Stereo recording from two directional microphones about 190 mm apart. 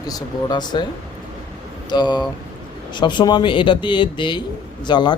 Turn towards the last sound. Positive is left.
turn(degrees=25)  # may be behind; listen again after turning